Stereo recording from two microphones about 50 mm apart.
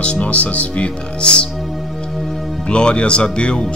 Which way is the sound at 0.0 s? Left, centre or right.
Left.